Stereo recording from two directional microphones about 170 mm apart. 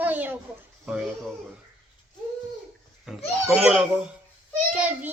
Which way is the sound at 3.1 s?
5° right (ahead or behind).